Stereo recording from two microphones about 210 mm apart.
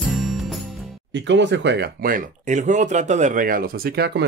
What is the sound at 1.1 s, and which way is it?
Speech, 60° right (ahead or behind).